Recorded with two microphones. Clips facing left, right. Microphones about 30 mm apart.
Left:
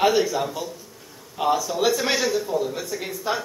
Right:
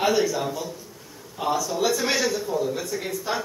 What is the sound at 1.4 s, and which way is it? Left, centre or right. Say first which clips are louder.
Speech: left 2 dB; centre.